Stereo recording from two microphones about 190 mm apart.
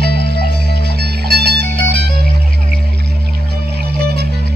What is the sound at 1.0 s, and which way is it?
Music, 60° right (ahead or behind).